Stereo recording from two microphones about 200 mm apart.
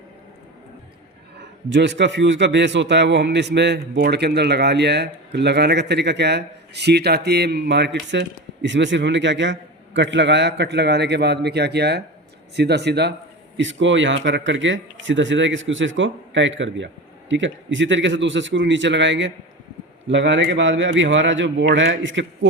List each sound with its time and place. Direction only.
1.7 s speech: 60° right (ahead or behind)
13.6 s speech: 70° right (ahead or behind)